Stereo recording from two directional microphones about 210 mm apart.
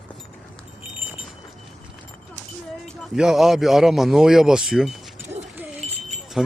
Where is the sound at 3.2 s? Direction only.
Centre (ahead or behind).